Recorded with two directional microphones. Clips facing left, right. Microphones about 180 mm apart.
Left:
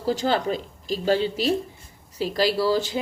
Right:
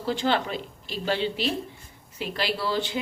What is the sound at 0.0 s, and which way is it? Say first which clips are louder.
Speech: left 3 dB; 40° left (ahead or behind).